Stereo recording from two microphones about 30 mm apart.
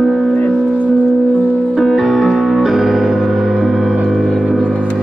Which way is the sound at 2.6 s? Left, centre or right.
Centre.